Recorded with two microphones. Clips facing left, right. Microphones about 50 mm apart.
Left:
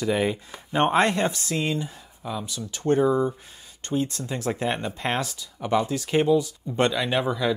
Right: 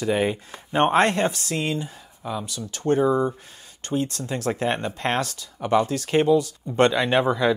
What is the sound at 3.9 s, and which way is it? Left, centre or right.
Speech, right.